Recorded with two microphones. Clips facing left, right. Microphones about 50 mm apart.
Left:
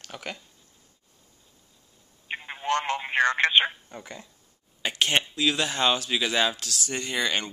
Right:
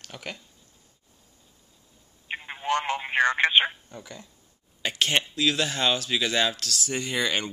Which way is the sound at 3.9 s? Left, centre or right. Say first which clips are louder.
Left 1 dB; left.